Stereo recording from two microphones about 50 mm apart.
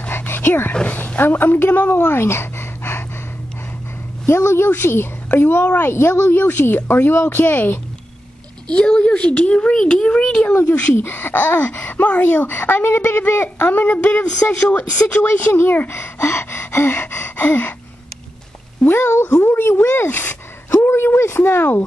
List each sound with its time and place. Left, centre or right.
0.3 s speech: left
0.9 s speech: left
2.1 s a sound: left
4.3 s speech: left
4.6 s speech: left
8.6 s speech: centre
10.6 s speech: left
11.0 s speech: left
12.4 s speech: left
13.6 s speech: left
15.2 s speech: left
18.9 s speech: left
19.6 s a sound: left
21.2 s speech: left